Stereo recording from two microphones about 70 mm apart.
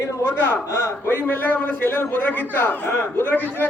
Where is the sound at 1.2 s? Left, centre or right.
Left.